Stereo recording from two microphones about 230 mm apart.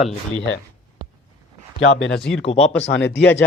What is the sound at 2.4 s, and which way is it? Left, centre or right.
Speech, left.